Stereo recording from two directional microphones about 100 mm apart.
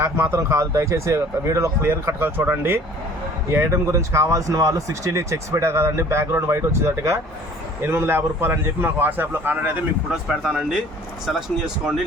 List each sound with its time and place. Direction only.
0.0 s speech: 30° right (ahead or behind)
10.1 s speech: 5° right (ahead or behind)